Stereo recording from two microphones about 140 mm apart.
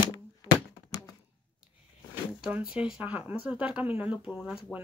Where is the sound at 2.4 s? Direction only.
10° right (ahead or behind).